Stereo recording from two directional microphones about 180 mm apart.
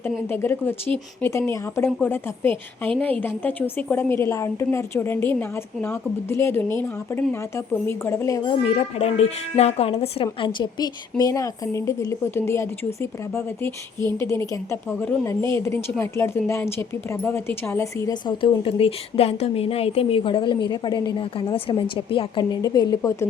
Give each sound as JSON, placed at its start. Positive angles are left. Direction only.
{"t": 0.3, "sound": "a woman's voice", "side_deg": 10}
{"t": 8.6, "sound": "a woman's voice", "side_deg": 30}
{"t": 10.4, "sound": "a woman's voice", "side_deg": 25}